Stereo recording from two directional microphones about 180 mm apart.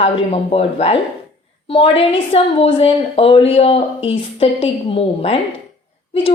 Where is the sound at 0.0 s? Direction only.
30° left (ahead or behind).